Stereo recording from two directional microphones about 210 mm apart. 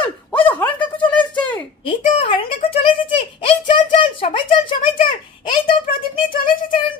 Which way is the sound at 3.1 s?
25° left (ahead or behind).